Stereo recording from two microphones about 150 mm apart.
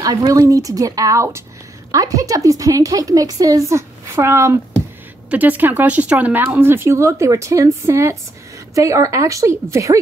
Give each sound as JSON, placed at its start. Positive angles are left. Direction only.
{"t": 0.0, "sound": "a woman's voice", "side_deg": -25}